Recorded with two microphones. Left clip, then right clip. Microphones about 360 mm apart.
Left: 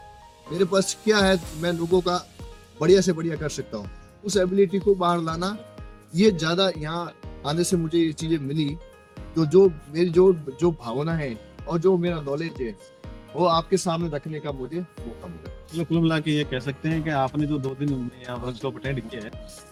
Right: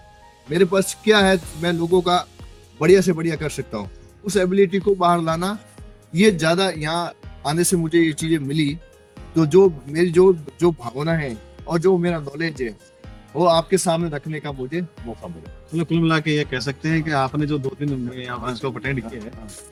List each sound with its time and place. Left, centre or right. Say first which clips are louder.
0.6 s speech: right 3 dB; left
15.8 s a man's voice: right 4 dB; left